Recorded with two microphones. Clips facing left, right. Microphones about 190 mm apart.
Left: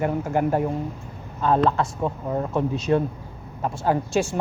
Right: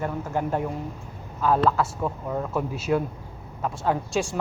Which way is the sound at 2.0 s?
20° left (ahead or behind).